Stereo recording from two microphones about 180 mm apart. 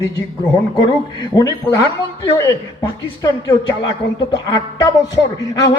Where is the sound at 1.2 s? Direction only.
20° left (ahead or behind).